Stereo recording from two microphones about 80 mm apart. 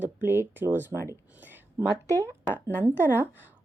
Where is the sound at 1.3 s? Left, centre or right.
Right.